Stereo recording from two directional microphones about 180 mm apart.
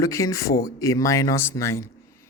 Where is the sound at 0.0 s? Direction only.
15° left (ahead or behind).